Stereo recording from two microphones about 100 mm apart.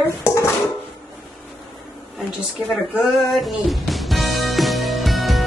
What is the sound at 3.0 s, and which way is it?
Music, centre (ahead or behind).